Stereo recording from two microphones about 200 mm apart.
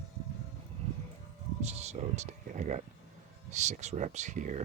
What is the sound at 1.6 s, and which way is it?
Speech, 35° right (ahead or behind).